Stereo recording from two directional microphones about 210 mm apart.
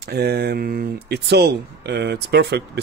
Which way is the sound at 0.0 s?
50° right (ahead or behind).